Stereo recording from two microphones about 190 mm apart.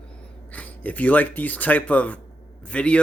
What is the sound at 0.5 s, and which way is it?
Speech, 10° left (ahead or behind).